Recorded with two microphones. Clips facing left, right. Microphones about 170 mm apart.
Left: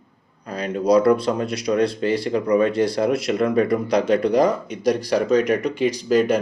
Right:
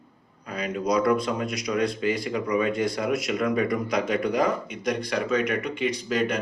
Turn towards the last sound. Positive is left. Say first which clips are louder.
# left 8 dB
turn(degrees=40)  # may be behind; listen again after turning